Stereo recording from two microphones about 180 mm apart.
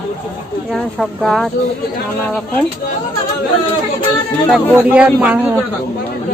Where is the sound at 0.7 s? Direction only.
5° left (ahead or behind).